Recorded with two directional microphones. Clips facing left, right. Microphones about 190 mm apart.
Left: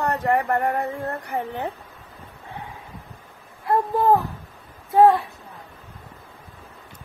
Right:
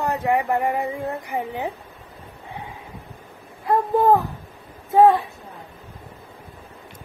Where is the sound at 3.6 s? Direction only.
15° right (ahead or behind).